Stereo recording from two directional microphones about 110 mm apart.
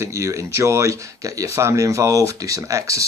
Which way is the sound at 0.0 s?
30° right (ahead or behind).